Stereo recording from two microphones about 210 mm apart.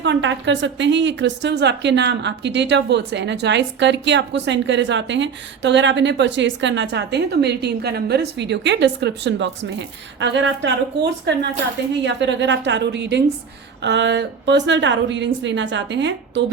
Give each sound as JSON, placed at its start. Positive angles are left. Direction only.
{"t": 0.0, "sound": "a woman's voice", "side_deg": -60}